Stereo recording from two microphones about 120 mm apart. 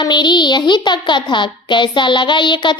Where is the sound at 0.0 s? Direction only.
40° left (ahead or behind).